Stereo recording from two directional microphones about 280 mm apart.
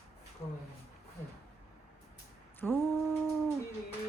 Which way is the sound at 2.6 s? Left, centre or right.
Centre.